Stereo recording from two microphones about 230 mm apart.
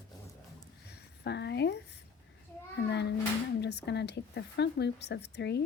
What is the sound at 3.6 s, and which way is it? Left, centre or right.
Speech, left.